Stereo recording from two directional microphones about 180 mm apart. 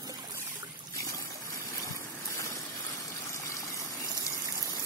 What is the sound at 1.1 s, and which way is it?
Vehicle, 20° left (ahead or behind).